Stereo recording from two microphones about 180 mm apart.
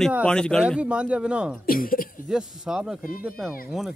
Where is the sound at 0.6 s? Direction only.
5° right (ahead or behind).